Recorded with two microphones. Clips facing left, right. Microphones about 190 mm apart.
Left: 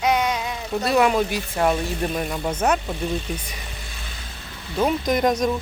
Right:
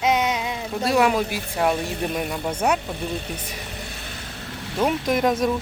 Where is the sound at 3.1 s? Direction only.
60° right (ahead or behind).